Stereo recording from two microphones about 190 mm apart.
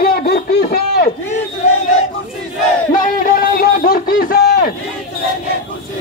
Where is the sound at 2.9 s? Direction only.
45° left (ahead or behind).